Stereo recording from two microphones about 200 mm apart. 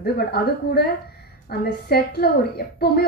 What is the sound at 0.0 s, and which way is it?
A woman's voice, 55° left (ahead or behind).